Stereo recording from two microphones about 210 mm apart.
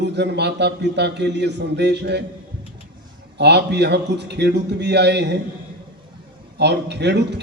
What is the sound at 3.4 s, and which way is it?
A man's voice, 55° right (ahead or behind).